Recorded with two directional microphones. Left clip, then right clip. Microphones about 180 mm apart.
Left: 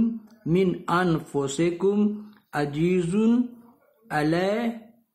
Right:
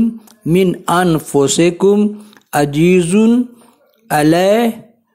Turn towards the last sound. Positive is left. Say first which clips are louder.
# right 13 dB
turn(degrees=-40)  # may be behind; listen again after turning